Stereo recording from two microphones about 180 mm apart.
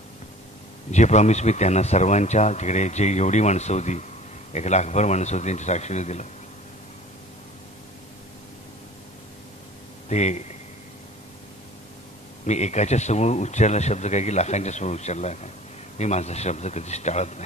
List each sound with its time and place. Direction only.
0.9 s speech: 40° left (ahead or behind)
10.0 s speech: 40° left (ahead or behind)
12.4 s speech: 40° left (ahead or behind)